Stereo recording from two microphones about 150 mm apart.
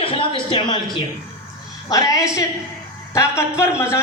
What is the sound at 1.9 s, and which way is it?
Speech, 25° left (ahead or behind).